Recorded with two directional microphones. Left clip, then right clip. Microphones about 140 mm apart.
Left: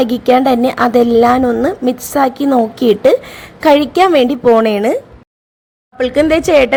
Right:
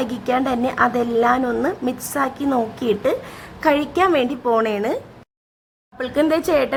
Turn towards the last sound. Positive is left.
turn(degrees=20)  # may be behind; listen again after turning